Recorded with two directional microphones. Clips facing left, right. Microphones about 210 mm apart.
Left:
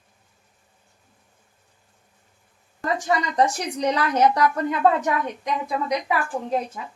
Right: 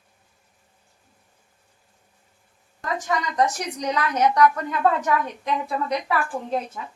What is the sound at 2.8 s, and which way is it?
A woman's voice, 30° left (ahead or behind).